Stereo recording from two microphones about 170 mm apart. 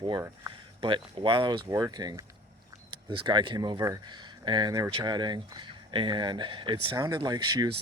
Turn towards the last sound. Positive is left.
turn(degrees=-25)  # may be behind; listen again after turning